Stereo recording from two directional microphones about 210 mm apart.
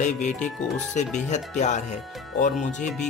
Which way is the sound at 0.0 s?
35° left (ahead or behind).